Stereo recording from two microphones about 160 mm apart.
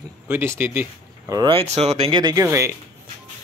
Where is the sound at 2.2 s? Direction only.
20° right (ahead or behind).